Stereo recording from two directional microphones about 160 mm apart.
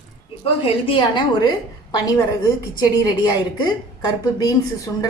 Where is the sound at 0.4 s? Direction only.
35° left (ahead or behind).